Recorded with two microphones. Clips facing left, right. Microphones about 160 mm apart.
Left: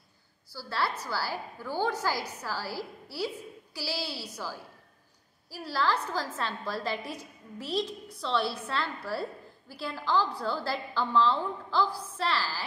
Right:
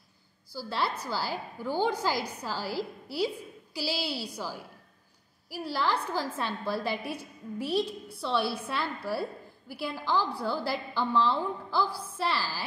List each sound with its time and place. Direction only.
0.5 s a woman's voice: 15° right (ahead or behind)